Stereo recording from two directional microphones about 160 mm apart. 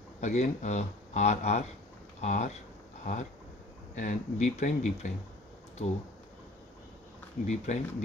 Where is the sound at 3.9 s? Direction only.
50° left (ahead or behind).